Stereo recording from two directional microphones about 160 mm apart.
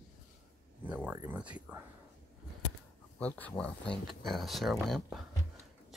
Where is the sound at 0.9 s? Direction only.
10° right (ahead or behind).